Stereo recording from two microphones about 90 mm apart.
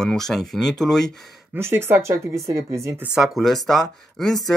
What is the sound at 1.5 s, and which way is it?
Speech, 25° right (ahead or behind).